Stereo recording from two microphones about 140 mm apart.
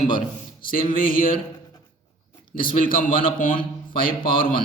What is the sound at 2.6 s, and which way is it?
Speech, 75° left (ahead or behind).